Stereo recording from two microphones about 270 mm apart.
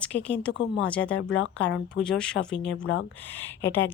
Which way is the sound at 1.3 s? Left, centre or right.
Left.